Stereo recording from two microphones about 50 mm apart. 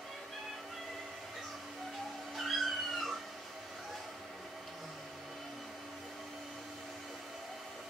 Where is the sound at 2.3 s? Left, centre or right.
Centre.